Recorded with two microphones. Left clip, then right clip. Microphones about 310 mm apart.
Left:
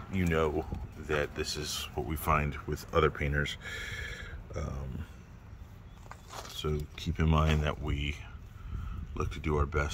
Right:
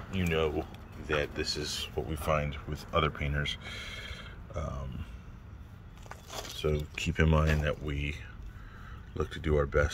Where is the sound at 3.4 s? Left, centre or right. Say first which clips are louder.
Even; centre.